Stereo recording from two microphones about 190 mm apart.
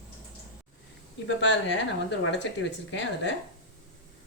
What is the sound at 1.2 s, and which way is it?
Speech, 75° left (ahead or behind).